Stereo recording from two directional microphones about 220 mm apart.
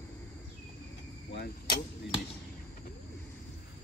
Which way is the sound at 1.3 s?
45° left (ahead or behind).